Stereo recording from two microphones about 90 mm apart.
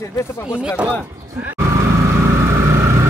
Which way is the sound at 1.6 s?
35° right (ahead or behind).